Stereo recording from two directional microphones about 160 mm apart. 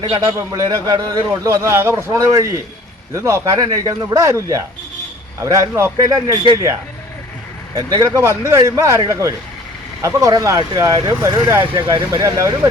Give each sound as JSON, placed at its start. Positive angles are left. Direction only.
{"t": 0.0, "sound": "a man's voice", "side_deg": -30}
{"t": 7.9, "sound": "a man's voice", "side_deg": -25}